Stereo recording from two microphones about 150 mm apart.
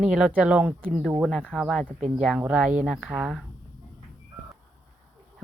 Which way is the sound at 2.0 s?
50° right (ahead or behind).